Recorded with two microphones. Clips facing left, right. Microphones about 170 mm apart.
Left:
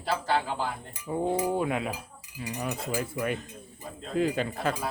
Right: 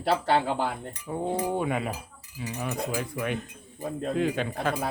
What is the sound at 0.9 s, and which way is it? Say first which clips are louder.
Speech: left 1 dB; 5° left (ahead or behind).